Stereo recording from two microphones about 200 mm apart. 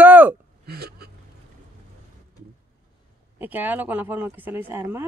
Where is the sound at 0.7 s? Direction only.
50° right (ahead or behind).